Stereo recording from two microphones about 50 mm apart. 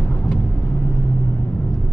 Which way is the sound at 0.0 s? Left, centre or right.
Left.